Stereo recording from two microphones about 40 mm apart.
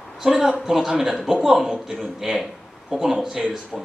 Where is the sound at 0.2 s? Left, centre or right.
Centre.